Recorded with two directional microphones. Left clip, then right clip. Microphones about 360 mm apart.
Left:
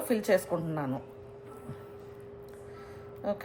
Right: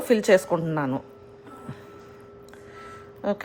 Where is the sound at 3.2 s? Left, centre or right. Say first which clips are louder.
Right 6 dB; right.